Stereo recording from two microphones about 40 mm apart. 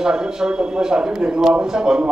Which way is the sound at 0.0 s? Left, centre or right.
Centre.